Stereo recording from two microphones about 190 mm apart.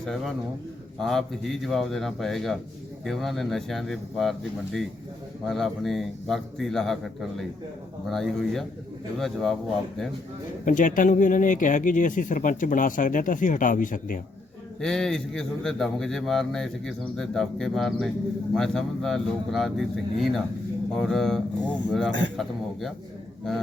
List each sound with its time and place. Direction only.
0.0 s a man's voice: centre (ahead or behind)
10.7 s speech: 45° left (ahead or behind)
14.8 s a man's voice: centre (ahead or behind)